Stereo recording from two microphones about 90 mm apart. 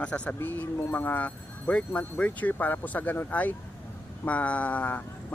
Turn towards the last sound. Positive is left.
turn(degrees=15)  # may be behind; listen again after turning